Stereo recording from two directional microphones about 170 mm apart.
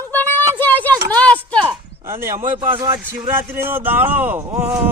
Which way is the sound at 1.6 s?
15° right (ahead or behind).